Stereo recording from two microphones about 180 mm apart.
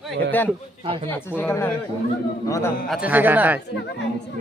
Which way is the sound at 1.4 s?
10° left (ahead or behind).